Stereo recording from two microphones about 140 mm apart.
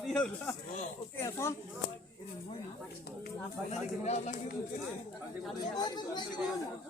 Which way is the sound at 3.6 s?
50° left (ahead or behind).